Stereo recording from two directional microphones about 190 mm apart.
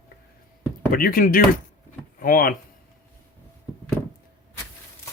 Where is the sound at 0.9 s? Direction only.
50° left (ahead or behind).